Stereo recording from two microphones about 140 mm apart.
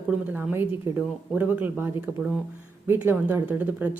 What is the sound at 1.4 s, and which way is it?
A man's voice, 15° right (ahead or behind).